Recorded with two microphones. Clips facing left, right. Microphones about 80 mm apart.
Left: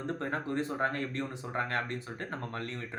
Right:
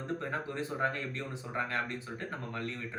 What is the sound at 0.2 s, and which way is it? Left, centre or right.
Speech, left.